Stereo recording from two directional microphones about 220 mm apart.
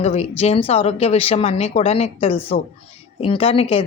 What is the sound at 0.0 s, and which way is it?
Speech, 30° left (ahead or behind).